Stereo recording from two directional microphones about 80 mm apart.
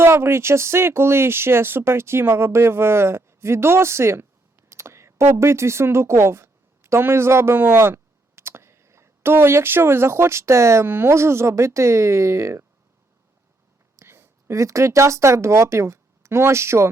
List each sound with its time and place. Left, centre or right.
0.0 s speech: right
13.9 s speech: right